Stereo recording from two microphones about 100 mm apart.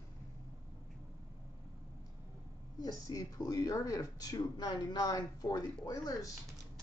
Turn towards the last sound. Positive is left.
turn(degrees=40)  # may be behind; listen again after turning